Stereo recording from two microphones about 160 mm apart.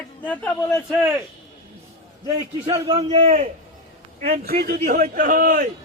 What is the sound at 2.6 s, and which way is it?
Speech, 30° right (ahead or behind).